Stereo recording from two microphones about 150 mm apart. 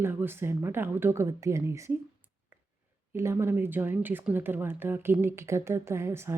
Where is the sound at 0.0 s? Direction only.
15° right (ahead or behind).